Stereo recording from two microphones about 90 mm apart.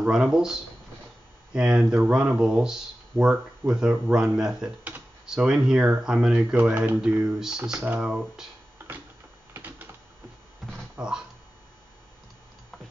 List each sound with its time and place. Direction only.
0.0 s speech: 5° right (ahead or behind)
6.5 s speech: 20° right (ahead or behind)
9.5 s typing: 20° right (ahead or behind)
11.0 s speech: 10° right (ahead or behind)